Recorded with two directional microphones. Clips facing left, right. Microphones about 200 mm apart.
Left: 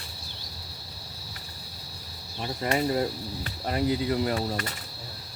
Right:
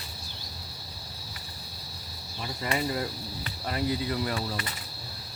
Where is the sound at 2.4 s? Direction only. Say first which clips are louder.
Left 4 dB; 45° left (ahead or behind).